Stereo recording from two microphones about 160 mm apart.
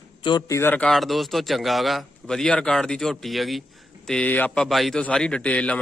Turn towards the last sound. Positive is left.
turn(degrees=10)  # may be behind; listen again after turning